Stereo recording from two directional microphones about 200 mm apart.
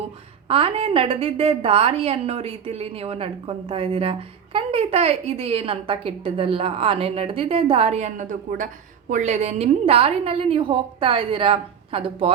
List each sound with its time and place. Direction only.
0.4 s a woman's voice: 30° right (ahead or behind)